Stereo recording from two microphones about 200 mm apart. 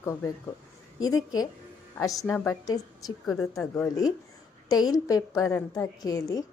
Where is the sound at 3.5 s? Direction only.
15° left (ahead or behind).